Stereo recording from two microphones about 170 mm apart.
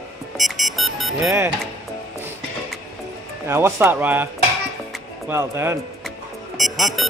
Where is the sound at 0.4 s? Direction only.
Centre (ahead or behind).